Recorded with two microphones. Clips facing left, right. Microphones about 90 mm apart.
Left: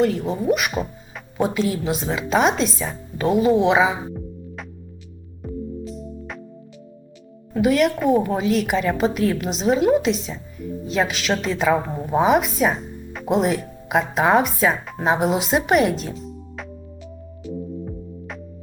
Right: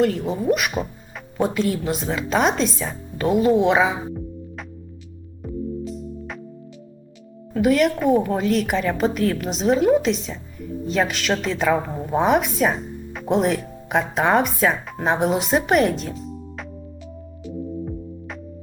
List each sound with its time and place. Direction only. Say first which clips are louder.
0.0 s speech: even; centre (ahead or behind)
5.4 s music: right 2 dB; centre (ahead or behind)
7.5 s a woman's voice: even; centre (ahead or behind)
17.8 s music: right 2 dB; centre (ahead or behind)